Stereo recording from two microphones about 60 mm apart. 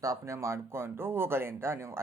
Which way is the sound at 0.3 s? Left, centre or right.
Right.